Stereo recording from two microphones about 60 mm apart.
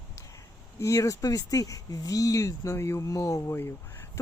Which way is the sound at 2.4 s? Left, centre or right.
Left.